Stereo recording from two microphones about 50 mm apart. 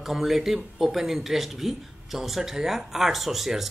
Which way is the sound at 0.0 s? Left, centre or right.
Centre.